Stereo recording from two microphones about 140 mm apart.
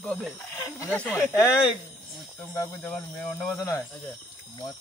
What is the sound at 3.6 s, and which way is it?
Speech, 20° left (ahead or behind).